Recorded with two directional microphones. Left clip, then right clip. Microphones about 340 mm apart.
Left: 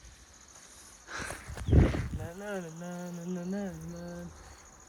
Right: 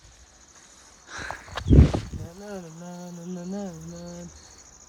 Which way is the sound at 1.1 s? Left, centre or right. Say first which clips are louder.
Right 4 dB; centre.